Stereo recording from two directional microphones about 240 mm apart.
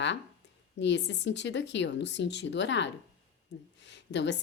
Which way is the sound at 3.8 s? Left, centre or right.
Left.